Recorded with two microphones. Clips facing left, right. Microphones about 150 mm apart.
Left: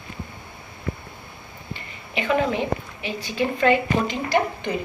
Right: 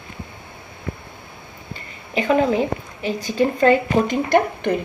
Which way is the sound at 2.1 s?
40° right (ahead or behind).